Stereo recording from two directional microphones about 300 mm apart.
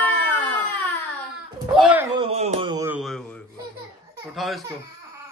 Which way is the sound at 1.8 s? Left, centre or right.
Centre.